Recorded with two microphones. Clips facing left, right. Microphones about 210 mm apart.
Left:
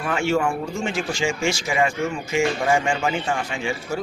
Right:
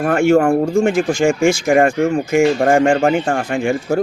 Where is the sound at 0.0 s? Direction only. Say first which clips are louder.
Right 9 dB; 50° right (ahead or behind).